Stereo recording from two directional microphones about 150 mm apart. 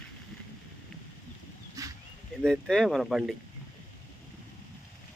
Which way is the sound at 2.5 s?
Centre (ahead or behind).